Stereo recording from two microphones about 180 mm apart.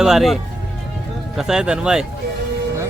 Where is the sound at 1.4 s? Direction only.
5° right (ahead or behind).